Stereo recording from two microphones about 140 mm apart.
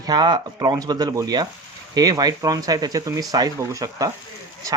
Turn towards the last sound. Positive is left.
turn(degrees=-25)  # may be behind; listen again after turning